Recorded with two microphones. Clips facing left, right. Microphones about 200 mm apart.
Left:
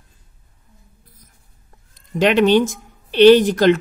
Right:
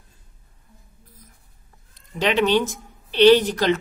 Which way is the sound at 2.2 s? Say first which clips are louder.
Left 5 dB; 50° left (ahead or behind).